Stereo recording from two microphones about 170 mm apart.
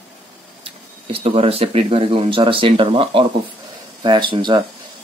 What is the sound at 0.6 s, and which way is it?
Speech, 35° right (ahead or behind).